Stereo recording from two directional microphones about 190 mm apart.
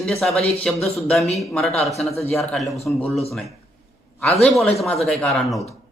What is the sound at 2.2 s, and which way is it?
Speech, 5° left (ahead or behind).